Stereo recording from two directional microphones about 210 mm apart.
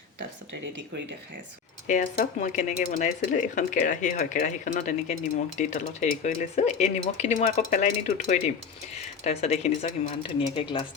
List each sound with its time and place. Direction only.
1.9 s speech: 40° left (ahead or behind)